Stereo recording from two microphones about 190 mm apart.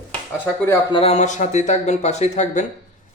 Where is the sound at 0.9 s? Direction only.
30° left (ahead or behind).